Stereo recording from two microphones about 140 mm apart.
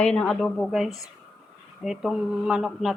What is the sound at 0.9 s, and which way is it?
Speech, 25° left (ahead or behind).